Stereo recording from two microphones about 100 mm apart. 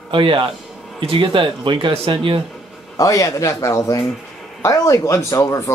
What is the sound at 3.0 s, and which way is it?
Speech, 35° left (ahead or behind).